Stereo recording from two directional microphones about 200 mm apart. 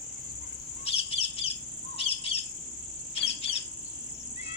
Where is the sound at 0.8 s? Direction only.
30° left (ahead or behind).